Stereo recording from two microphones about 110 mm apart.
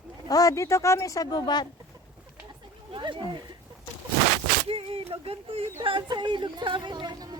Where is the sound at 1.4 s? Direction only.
40° left (ahead or behind).